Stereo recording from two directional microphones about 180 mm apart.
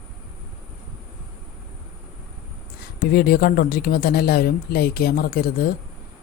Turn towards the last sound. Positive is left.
turn(degrees=55)  # may be behind; listen again after turning